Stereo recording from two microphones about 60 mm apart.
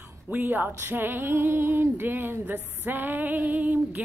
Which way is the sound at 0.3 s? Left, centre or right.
Right.